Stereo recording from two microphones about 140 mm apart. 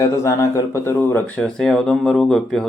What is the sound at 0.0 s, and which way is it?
Speech, 20° left (ahead or behind).